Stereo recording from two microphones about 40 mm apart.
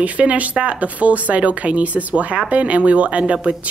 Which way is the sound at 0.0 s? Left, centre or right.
Right.